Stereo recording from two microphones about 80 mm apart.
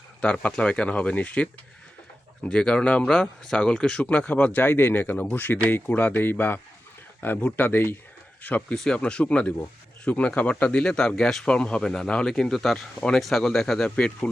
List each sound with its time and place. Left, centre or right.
0.2 s speech: centre
2.5 s speech: centre
8.7 s speech: centre